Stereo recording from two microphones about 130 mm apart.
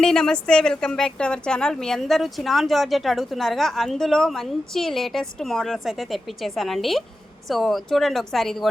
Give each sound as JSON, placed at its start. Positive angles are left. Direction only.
{"t": 0.0, "sound": "a woman's voice", "side_deg": 5}